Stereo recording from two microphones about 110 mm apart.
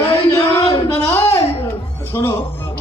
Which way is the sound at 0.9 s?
20° left (ahead or behind).